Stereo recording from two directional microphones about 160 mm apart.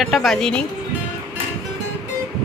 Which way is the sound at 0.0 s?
Centre (ahead or behind).